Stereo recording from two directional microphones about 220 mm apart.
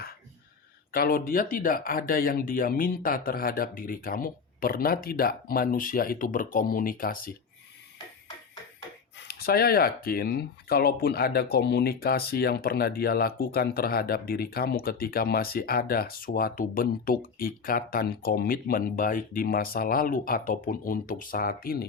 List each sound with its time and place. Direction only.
0.9 s speech: 40° left (ahead or behind)
9.1 s speech: 45° left (ahead or behind)